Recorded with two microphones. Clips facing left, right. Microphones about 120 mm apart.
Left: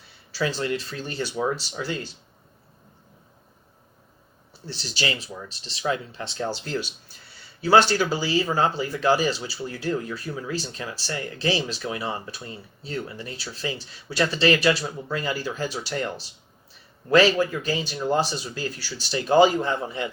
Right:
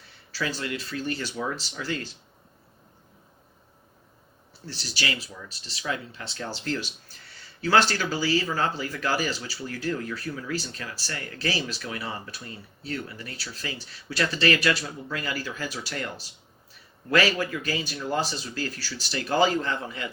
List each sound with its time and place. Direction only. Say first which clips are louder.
0.3 s a sound: left 4 dB; 15° left (ahead or behind)
0.6 s speech: left 3 dB; 30° left (ahead or behind)
4.6 s speech: left 3 dB; 20° left (ahead or behind)
7.6 s speech: left 4 dB; 15° left (ahead or behind)
17.1 s speech: left 5 dB; 20° left (ahead or behind)